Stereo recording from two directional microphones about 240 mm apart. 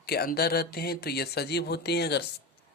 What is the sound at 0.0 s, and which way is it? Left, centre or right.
A man's voice, left.